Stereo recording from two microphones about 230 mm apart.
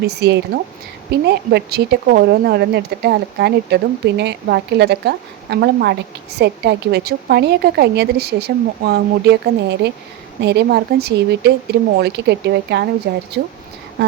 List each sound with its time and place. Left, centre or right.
0.1 s speech: right